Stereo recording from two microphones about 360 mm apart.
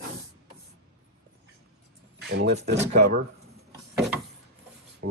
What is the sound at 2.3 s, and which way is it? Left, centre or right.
Speech, right.